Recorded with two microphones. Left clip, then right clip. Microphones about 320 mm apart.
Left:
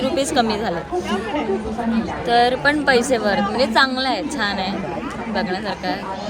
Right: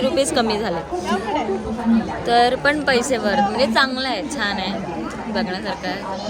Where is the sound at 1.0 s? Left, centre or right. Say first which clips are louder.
Right 1 dB; right.